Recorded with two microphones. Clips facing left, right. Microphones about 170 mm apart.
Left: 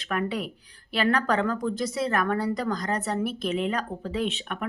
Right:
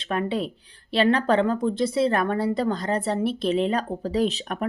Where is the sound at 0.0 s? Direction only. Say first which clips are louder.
Right 3 dB; 30° right (ahead or behind).